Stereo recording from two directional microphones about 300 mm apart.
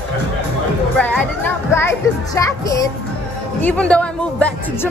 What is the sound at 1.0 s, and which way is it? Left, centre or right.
A child's voice, centre.